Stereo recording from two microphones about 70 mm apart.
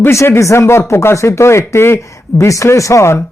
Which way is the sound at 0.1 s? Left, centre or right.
Left.